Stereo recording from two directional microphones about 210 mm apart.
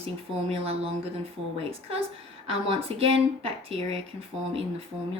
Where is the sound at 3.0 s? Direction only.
25° right (ahead or behind).